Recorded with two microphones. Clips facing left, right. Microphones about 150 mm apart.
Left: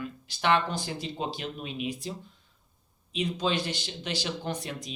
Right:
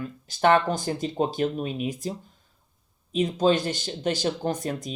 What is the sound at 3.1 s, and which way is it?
Speech, 45° right (ahead or behind).